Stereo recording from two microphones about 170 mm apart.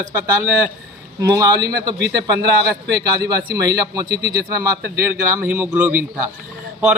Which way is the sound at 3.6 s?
20° right (ahead or behind).